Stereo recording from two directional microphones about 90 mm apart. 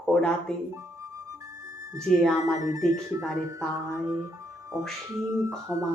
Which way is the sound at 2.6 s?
40° right (ahead or behind).